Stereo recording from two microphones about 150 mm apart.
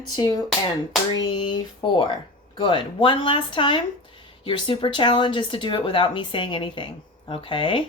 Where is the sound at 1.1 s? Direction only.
30° left (ahead or behind).